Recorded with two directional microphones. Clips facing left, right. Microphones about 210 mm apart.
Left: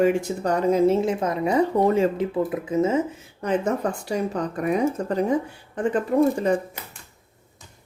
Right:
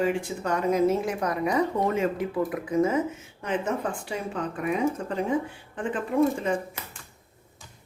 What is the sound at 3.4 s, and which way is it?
Speech, 40° left (ahead or behind).